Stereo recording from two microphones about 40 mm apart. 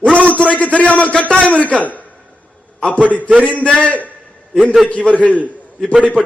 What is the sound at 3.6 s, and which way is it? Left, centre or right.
A man's voice, left.